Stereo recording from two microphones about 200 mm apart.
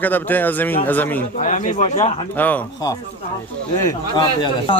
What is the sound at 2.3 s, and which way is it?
Speech, 10° left (ahead or behind).